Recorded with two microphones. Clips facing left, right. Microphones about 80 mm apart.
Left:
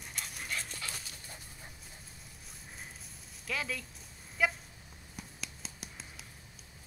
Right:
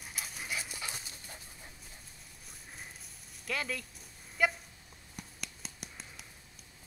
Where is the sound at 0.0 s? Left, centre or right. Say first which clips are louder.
Even; centre.